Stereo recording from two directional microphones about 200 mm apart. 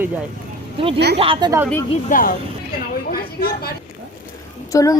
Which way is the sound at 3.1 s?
50° left (ahead or behind).